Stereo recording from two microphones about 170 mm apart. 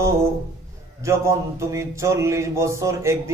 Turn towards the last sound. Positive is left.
turn(degrees=-15)  # may be behind; listen again after turning